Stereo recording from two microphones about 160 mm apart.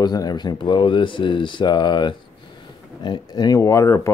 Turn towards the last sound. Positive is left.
turn(degrees=20)  # may be behind; listen again after turning